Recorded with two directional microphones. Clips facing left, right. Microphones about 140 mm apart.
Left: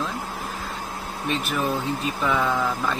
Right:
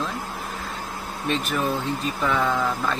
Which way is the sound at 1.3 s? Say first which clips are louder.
Even; centre (ahead or behind).